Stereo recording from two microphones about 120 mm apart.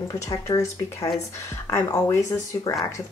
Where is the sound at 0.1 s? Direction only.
25° left (ahead or behind).